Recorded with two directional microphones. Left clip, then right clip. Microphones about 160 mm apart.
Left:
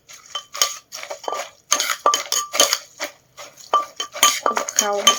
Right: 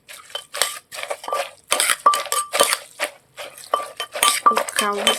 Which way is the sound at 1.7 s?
25° right (ahead or behind).